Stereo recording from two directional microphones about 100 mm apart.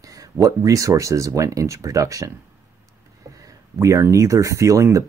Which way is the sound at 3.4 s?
30° right (ahead or behind).